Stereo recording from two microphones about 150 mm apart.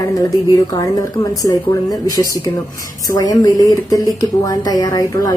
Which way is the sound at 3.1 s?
25° left (ahead or behind).